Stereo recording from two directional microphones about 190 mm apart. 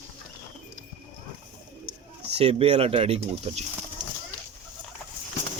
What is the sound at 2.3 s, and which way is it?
Speech, 30° right (ahead or behind).